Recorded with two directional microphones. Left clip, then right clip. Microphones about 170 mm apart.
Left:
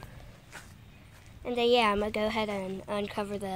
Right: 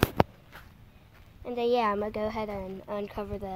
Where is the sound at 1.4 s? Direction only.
Centre (ahead or behind).